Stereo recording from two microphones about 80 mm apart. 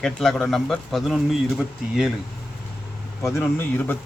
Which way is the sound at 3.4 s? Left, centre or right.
Left.